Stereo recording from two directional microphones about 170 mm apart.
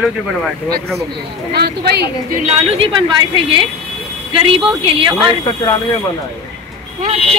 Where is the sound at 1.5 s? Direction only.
70° right (ahead or behind).